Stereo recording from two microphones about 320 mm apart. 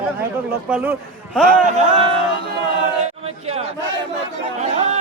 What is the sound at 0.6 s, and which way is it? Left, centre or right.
Speech, centre.